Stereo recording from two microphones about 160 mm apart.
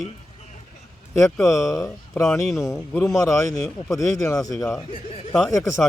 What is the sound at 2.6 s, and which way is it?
A man's voice, 20° left (ahead or behind).